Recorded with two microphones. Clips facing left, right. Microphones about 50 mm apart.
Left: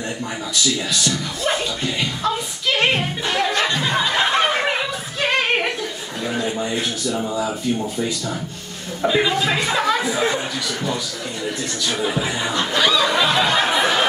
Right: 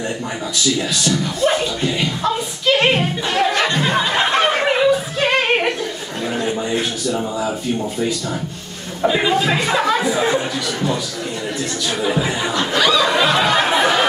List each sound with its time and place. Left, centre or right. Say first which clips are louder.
0.7 s speech: right 4 dB; centre
3.8 s a sound: right 2 dB; centre
9.0 s speech: right 2 dB; centre
12.1 s chuckle: right 3 dB; centre
13.0 s snicker: right 2 dB; centre
13.5 s a sound: right 3 dB; centre